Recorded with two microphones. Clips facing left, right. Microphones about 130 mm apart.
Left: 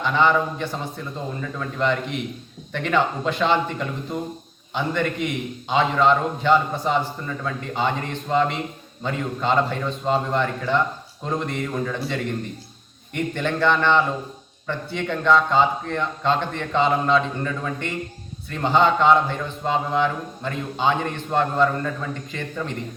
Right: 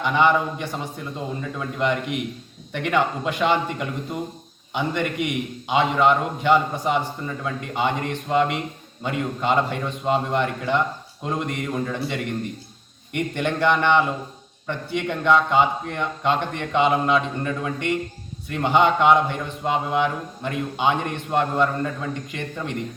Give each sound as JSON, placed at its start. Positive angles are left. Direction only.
{"t": 0.0, "sound": "a man's voice", "side_deg": -15}